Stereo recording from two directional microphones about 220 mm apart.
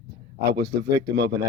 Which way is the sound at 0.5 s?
50° right (ahead or behind).